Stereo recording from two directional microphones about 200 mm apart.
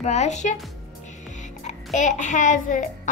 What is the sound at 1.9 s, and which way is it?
Speech, 40° left (ahead or behind).